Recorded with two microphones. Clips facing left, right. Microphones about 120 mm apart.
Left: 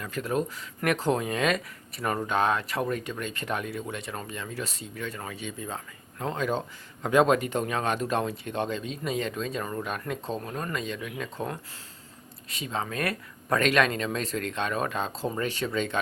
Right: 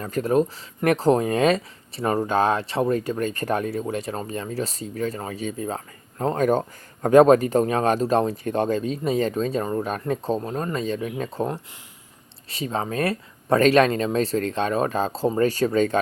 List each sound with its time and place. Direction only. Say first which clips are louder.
0.0 s speech: right 8 dB; 40° right (ahead or behind)
12.5 s speech: right 6 dB; 35° right (ahead or behind)